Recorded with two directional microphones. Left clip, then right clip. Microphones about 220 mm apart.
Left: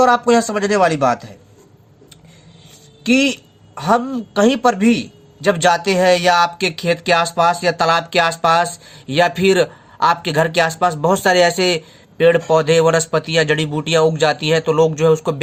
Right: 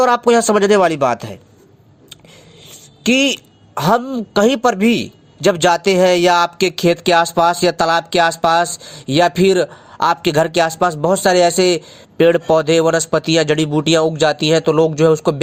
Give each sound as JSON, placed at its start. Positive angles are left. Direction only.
{"t": 0.0, "sound": "speech", "side_deg": -35}
{"t": 3.0, "sound": "a woman's voice", "side_deg": -30}